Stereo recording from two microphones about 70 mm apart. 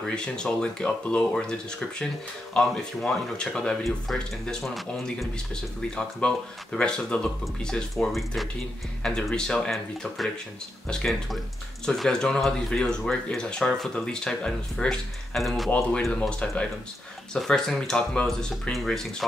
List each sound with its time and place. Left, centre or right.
0.0 s speech: centre
7.9 s speech: centre
15.3 s speech: centre
16.2 s speech: centre